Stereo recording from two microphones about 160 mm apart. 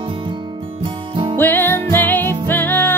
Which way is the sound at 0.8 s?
30° right (ahead or behind).